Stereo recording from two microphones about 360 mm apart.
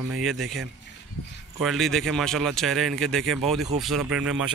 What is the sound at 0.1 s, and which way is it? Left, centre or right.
A man's voice, centre.